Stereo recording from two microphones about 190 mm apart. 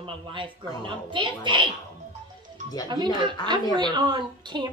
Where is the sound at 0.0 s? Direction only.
25° right (ahead or behind).